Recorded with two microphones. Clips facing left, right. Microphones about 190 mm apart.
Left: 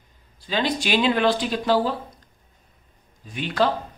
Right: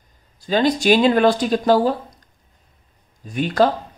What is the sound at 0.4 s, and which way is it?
Speech, 45° right (ahead or behind).